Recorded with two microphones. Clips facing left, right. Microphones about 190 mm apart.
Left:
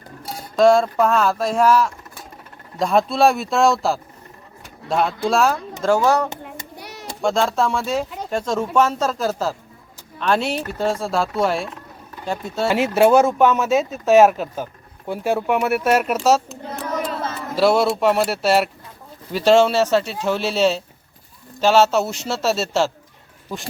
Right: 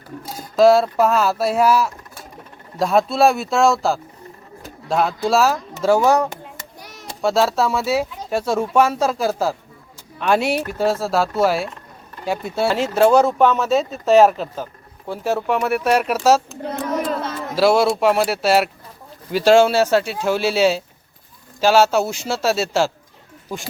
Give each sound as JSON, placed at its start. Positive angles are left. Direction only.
{"t": 0.5, "sound": "speech", "side_deg": -5}
{"t": 6.7, "sound": "hands", "side_deg": 65}
{"t": 7.2, "sound": "speech", "side_deg": -5}
{"t": 12.6, "sound": "speech", "side_deg": 10}